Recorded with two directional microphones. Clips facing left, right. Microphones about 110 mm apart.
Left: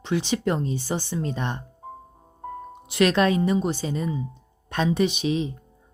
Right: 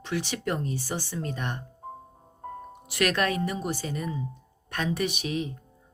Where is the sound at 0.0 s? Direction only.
20° left (ahead or behind).